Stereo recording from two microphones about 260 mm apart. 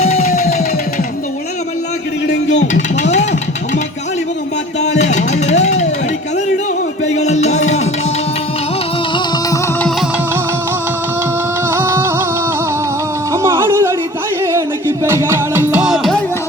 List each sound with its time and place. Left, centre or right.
0.0 s music: left
2.2 s a sound: left
2.7 s music: left
4.8 s music: left
7.1 s music: left
11.7 s music: centre
13.3 s music: centre